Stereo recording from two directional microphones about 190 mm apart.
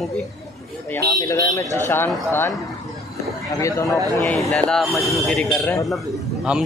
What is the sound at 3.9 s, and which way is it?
Speech, 20° right (ahead or behind).